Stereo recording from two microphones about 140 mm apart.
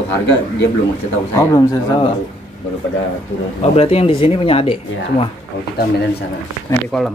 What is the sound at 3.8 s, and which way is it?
Speech, 45° left (ahead or behind).